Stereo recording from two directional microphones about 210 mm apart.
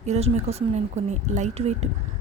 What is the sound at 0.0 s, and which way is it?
A woman's voice, 30° right (ahead or behind).